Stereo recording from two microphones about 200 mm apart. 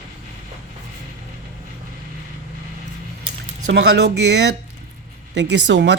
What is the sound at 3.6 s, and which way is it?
Speech, 55° right (ahead or behind).